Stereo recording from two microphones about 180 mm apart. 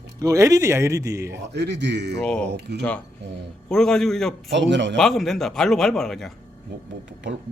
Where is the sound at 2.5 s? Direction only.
70° right (ahead or behind).